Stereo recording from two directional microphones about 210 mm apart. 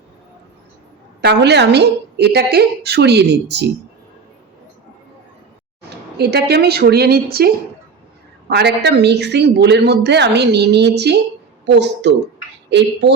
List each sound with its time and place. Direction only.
1.2 s speech: 55° right (ahead or behind)
6.1 s speech: 50° right (ahead or behind)